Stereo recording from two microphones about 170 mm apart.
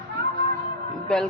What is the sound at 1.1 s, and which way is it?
Speech, 5° left (ahead or behind).